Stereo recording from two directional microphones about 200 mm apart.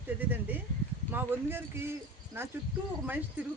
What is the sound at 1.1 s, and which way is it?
Speech, 10° right (ahead or behind).